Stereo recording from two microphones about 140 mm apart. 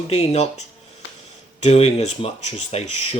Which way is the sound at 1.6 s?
50° left (ahead or behind).